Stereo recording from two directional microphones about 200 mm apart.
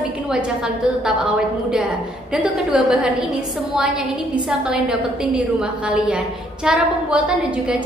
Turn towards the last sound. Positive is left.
turn(degrees=-5)  # may be behind; listen again after turning